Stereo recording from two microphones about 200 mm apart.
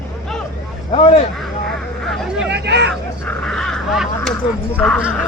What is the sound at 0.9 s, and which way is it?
Speech, 30° left (ahead or behind).